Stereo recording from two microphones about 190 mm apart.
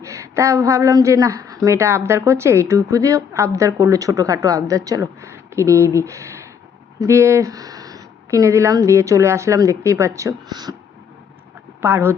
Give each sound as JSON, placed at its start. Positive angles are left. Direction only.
{"t": 0.0, "sound": "a woman's voice", "side_deg": -15}
{"t": 11.8, "sound": "a woman's voice", "side_deg": -10}